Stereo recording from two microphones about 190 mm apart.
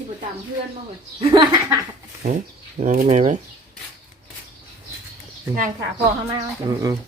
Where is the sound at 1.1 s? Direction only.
25° right (ahead or behind).